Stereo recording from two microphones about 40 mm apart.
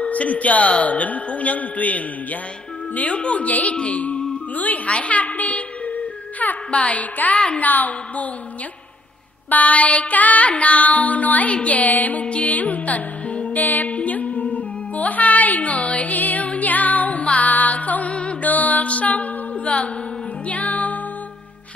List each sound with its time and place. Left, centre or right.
0.0 s music: left
2.9 s speech: left
3.2 s music: left
4.6 s a woman's voice: left
6.4 s music: left
7.6 s a woman's voice: left
9.5 s music: left
13.6 s music: left